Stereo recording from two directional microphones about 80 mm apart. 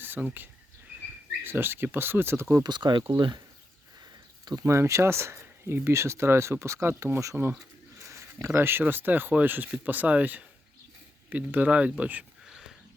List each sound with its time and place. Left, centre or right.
0.0 s speech: right
2.6 s speech: right
4.6 s speech: right
7.9 s a sound: right
8.8 s speech: right
12.5 s a sound: centre